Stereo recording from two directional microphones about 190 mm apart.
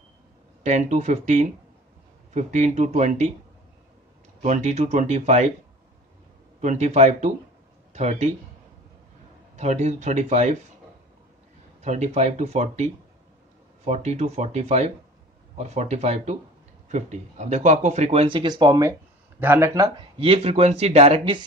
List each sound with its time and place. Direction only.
0.7 s speech: 40° right (ahead or behind)
4.4 s speech: 35° right (ahead or behind)
6.6 s speech: 35° right (ahead or behind)
9.6 s speech: 35° right (ahead or behind)
11.8 s speech: 35° right (ahead or behind); by 20.1 s 20° right (ahead or behind)
20.2 s speech: 30° right (ahead or behind)